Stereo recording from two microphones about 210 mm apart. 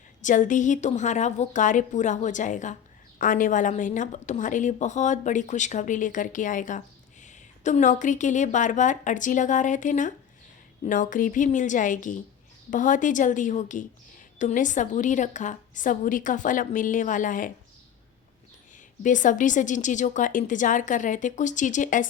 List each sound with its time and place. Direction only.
0.2 s a woman's voice: 35° left (ahead or behind)
19.0 s a woman's voice: 40° left (ahead or behind)